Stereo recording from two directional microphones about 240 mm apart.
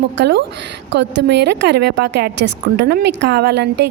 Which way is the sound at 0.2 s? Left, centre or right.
Right.